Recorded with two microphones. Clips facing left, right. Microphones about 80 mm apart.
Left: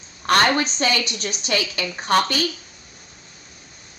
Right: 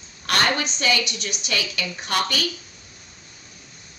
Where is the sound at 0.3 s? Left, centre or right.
Left.